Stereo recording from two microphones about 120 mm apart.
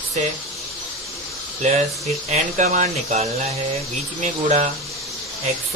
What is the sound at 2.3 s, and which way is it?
Speech, 80° right.